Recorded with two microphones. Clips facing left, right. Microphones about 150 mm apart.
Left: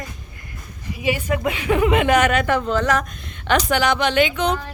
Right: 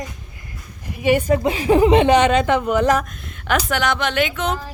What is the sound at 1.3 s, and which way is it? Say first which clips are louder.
Speech: right 5 dB; 35° right (ahead or behind).